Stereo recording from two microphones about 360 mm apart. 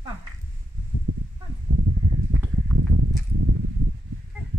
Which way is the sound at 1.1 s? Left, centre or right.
Right.